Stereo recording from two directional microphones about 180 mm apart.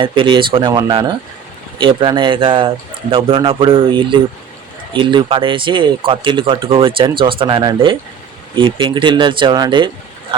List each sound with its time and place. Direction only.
0.0 s speech: 25° right (ahead or behind)